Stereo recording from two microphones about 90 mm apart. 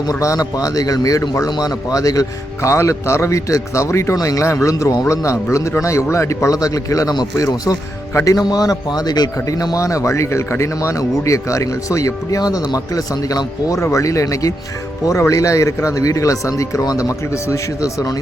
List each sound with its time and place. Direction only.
0.1 s speech: 40° left (ahead or behind)